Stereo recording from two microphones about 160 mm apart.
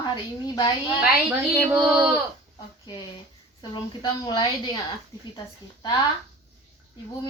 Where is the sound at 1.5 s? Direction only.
25° right (ahead or behind).